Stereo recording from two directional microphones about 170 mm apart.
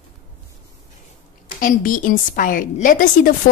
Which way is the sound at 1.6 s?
55° left (ahead or behind).